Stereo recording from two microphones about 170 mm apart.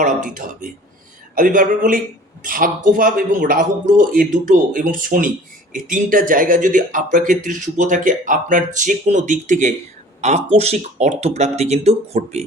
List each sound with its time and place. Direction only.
0.0 s speech: 50° right (ahead or behind)